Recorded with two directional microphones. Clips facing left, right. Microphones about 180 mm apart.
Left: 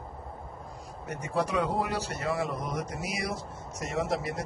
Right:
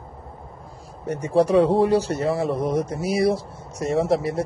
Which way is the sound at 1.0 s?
30° right (ahead or behind).